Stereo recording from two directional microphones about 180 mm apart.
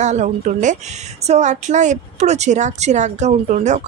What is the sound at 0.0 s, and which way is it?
Speech, 40° right (ahead or behind).